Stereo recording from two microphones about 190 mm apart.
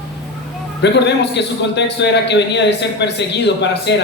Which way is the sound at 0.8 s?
65° left (ahead or behind).